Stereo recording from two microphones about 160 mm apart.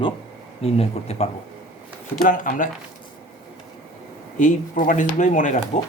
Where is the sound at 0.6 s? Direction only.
40° left (ahead or behind).